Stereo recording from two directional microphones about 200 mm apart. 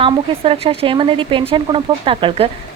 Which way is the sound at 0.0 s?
30° right (ahead or behind).